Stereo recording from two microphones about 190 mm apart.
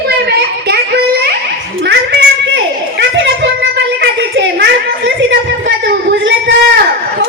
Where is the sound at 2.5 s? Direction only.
65° right (ahead or behind).